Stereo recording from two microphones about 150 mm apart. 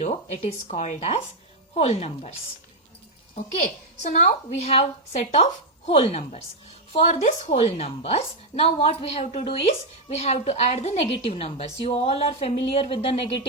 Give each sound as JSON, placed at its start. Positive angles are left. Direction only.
{"t": 0.0, "sound": "a woman's voice", "side_deg": 50}
{"t": 3.3, "sound": "a woman's voice", "side_deg": 55}